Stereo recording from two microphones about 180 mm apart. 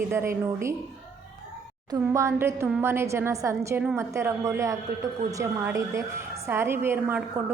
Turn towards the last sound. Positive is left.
turn(degrees=-10)  # may be behind; listen again after turning